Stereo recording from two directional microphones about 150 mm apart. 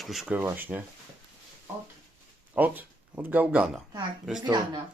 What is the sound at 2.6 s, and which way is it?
Speech, 10° right (ahead or behind).